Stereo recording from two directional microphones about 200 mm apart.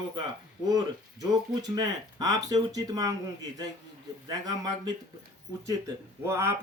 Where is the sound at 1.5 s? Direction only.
20° right (ahead or behind).